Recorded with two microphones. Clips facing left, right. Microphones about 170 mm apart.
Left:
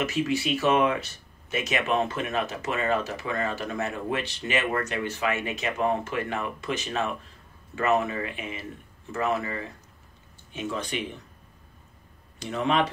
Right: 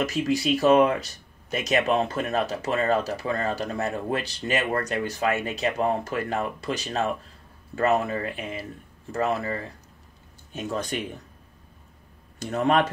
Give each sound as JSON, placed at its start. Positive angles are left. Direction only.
{"t": 0.0, "sound": "speech", "side_deg": -40}
{"t": 12.4, "sound": "speech", "side_deg": -45}